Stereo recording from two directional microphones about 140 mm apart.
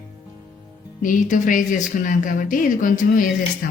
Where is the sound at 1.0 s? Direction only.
65° left (ahead or behind).